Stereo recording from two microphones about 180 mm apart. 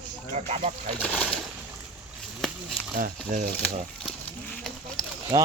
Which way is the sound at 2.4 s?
Centre (ahead or behind).